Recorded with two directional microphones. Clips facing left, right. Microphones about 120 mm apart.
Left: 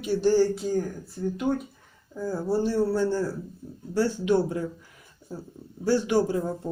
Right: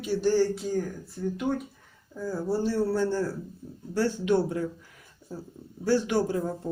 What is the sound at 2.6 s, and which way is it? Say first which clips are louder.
Speech: left 1 dB; 15° left (ahead or behind).